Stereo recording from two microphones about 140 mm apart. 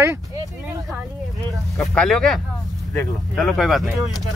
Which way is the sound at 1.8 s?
5° left (ahead or behind).